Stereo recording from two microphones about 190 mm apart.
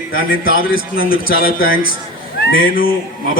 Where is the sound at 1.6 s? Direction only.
90° left.